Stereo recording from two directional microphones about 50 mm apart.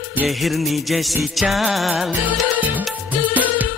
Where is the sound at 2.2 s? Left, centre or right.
Right.